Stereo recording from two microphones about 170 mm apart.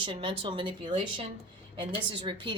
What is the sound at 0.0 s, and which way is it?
A woman's voice, 30° right (ahead or behind).